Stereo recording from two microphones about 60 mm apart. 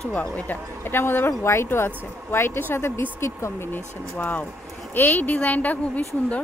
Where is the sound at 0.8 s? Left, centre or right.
Left.